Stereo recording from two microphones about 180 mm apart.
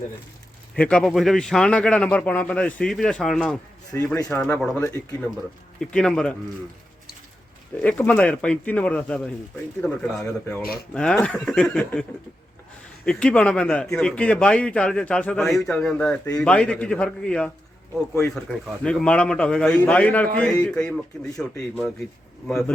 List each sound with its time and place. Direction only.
0.8 s a man's voice: 5° left (ahead or behind)
3.9 s a man's voice: 15° left (ahead or behind)
7.8 s a man's voice: 10° left (ahead or behind)
13.1 s a man's voice: 5° left (ahead or behind)